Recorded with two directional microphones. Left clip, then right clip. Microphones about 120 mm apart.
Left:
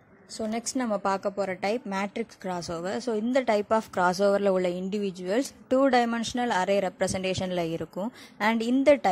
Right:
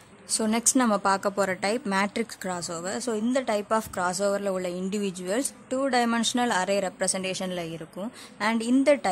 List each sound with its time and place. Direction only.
0.3 s a woman's voice: centre (ahead or behind)
1.6 s a woman's voice: 15° left (ahead or behind); by 4.8 s 30° left (ahead or behind)
4.8 s a woman's voice: 20° left (ahead or behind)
5.7 s a woman's voice: 35° left (ahead or behind)
6.0 s a woman's voice: 15° left (ahead or behind)